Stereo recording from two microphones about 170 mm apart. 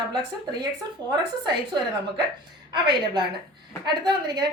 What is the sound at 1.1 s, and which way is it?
A woman's voice, 25° right (ahead or behind).